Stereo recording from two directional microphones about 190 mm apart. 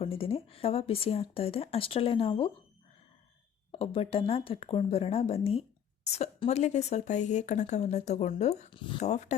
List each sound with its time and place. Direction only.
0.0 s speech: 30° left (ahead or behind)
3.7 s speech: 30° left (ahead or behind)